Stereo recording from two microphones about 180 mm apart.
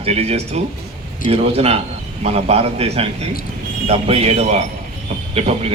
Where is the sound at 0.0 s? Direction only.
35° right (ahead or behind).